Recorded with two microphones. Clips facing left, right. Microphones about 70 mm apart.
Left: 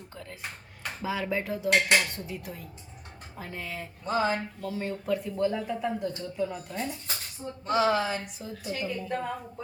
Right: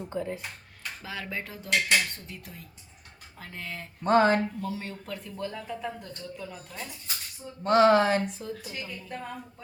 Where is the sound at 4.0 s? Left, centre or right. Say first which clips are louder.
Right 6 dB; right.